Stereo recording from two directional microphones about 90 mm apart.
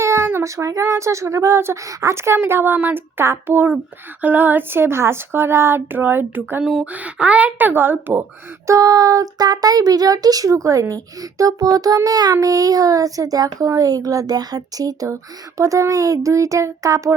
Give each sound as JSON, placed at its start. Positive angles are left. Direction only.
{"t": 0.0, "sound": "speech", "side_deg": -30}
{"t": 6.6, "sound": "speech", "side_deg": -5}
{"t": 8.6, "sound": "a child's voice", "side_deg": -40}